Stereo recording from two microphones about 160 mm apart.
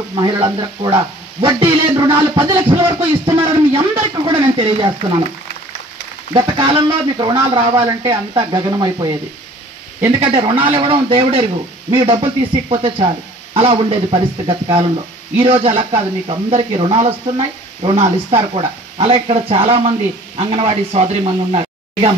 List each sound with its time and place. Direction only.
0.2 s speech: 30° right (ahead or behind)
6.3 s speech: 35° right (ahead or behind)